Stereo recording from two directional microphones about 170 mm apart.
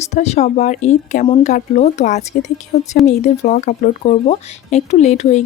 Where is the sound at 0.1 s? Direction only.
40° left (ahead or behind).